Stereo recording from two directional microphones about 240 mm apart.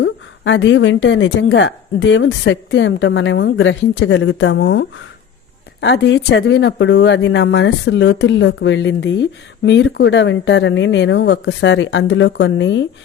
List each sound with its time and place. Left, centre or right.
0.0 s speech: left